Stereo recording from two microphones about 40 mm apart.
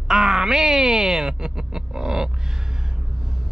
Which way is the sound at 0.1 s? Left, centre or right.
Centre.